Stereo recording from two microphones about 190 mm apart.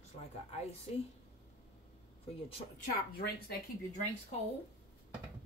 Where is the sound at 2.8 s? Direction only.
50° left (ahead or behind).